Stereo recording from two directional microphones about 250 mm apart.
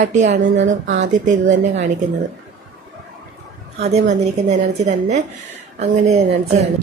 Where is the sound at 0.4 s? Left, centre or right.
Right.